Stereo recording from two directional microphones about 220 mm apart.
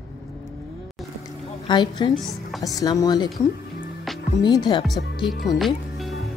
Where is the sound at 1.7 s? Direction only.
20° left (ahead or behind).